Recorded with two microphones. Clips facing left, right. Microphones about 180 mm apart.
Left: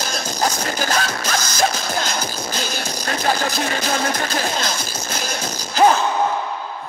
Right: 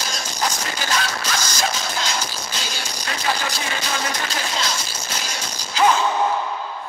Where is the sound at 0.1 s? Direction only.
45° left (ahead or behind).